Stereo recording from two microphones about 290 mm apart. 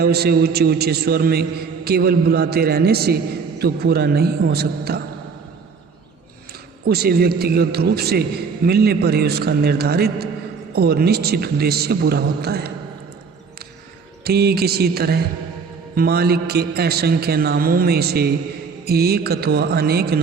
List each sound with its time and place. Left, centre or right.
0.0 s a man's voice: right
6.8 s a man's voice: right
14.3 s a man's voice: right